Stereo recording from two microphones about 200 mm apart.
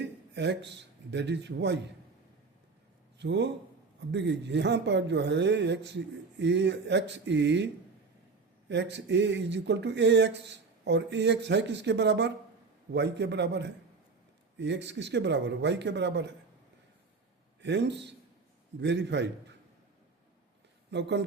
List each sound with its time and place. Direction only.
0.0 s speech: 60° right (ahead or behind)
3.2 s a man's voice: 60° right (ahead or behind)
8.7 s speech: 60° right (ahead or behind)
17.6 s speech: 60° right (ahead or behind)
20.9 s speech: 60° right (ahead or behind)